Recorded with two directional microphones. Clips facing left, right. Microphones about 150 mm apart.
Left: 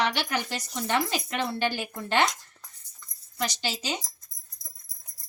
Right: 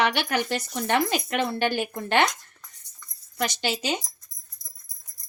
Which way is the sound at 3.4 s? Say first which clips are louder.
Right 4 dB; 60° right (ahead or behind).